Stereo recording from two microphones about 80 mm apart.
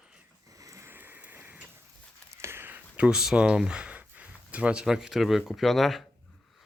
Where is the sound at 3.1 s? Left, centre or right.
Centre.